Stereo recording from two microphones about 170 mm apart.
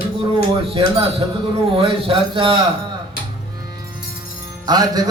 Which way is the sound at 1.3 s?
30° right (ahead or behind).